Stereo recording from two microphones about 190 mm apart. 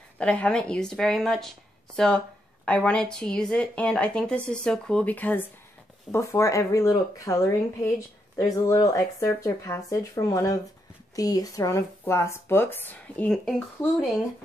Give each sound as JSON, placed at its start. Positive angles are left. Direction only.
{"t": 0.2, "sound": "speech", "side_deg": 5}